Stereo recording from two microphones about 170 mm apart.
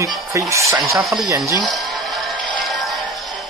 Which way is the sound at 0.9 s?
Centre (ahead or behind).